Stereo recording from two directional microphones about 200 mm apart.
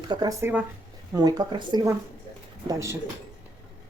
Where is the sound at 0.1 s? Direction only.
20° right (ahead or behind).